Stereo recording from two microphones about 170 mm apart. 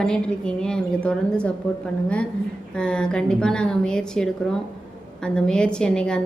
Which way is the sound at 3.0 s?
5° left (ahead or behind).